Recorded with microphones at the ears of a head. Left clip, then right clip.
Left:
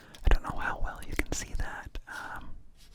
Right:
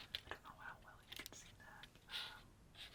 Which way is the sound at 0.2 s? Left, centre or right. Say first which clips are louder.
Left 19 dB; left.